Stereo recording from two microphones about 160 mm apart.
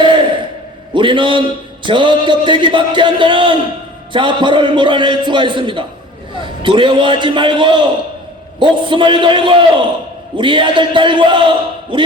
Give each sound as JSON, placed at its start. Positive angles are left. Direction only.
{"t": 0.9, "sound": "a man's voice", "side_deg": -30}